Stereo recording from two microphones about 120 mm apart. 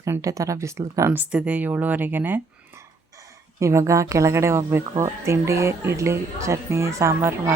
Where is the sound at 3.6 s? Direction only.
25° right (ahead or behind).